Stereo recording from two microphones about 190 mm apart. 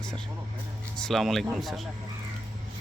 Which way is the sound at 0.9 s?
Centre (ahead or behind).